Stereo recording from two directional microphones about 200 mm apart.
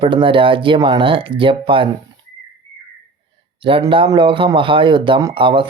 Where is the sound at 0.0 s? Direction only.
25° right (ahead or behind).